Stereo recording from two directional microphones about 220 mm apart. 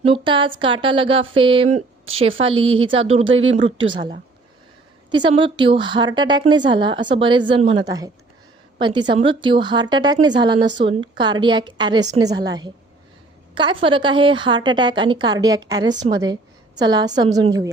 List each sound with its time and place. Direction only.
0.0 s speech: 25° right (ahead or behind)
3.2 s speech: 60° right (ahead or behind)
5.1 s a woman's voice: 20° right (ahead or behind)